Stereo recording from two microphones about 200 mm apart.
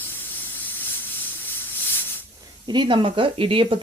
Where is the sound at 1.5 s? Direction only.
10° left (ahead or behind).